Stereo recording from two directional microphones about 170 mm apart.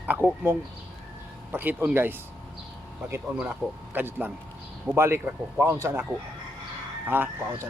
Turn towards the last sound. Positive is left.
turn(degrees=-10)  # may be behind; listen again after turning